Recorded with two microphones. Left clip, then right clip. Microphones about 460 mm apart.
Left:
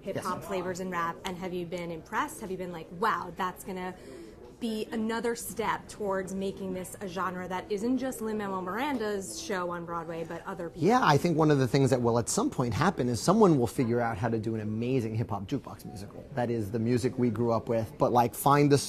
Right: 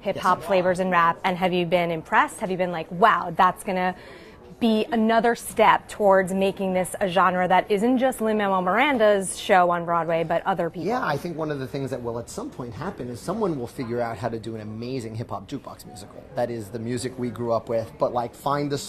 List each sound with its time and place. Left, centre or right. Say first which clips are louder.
0.0 s a woman's voice: right 12 dB; right
10.8 s speech: left 1 dB; left
13.7 s speech: right 1 dB; left
18.1 s speech: left 2 dB; left